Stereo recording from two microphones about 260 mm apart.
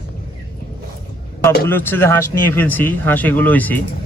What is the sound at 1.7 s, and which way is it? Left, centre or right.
Speech, centre.